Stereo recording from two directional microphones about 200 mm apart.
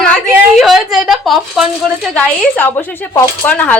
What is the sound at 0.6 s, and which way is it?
Speech, centre (ahead or behind).